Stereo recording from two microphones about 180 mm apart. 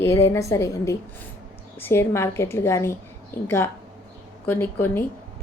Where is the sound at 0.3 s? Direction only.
15° left (ahead or behind).